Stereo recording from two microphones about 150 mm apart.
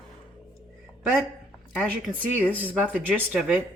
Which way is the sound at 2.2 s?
10° left (ahead or behind).